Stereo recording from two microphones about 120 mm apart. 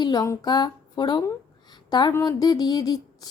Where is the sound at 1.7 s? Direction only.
35° left (ahead or behind).